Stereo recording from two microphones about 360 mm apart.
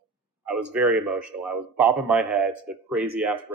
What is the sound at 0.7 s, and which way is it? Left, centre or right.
A man's voice, centre.